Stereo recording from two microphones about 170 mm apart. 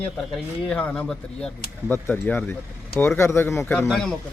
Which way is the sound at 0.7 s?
10° left (ahead or behind).